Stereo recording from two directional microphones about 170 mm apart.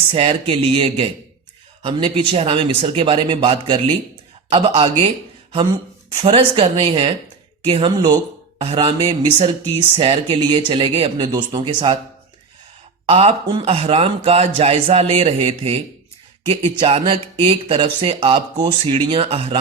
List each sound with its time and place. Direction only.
0.1 s a man's voice: 35° right (ahead or behind)
13.1 s speech: 35° right (ahead or behind)